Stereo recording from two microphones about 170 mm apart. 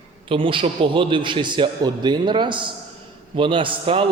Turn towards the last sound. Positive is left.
turn(degrees=-30)  # may be behind; listen again after turning